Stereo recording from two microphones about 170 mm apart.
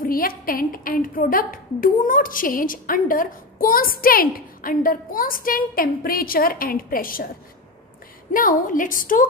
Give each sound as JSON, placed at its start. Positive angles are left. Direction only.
{"t": 0.0, "sound": "a woman's voice", "side_deg": 55}
{"t": 8.3, "sound": "a woman's voice", "side_deg": 55}